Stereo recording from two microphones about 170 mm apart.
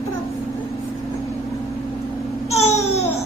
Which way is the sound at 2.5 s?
40° left (ahead or behind).